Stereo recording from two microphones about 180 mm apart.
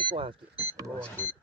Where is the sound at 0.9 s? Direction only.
5° left (ahead or behind).